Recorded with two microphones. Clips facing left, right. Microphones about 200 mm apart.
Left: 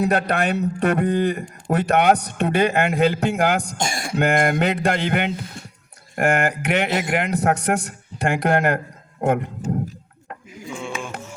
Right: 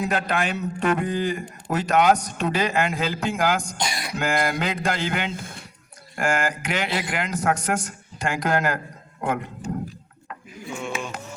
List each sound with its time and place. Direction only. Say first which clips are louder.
0.1 s a man's voice: left 4 dB; 60° left (ahead or behind)
9.2 s speech: left 6 dB; 45° left (ahead or behind)